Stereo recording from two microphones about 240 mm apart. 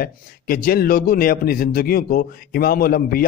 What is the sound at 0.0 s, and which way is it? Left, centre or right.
A man's voice, left.